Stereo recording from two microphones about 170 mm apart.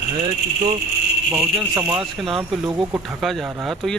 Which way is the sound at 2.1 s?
Centre (ahead or behind).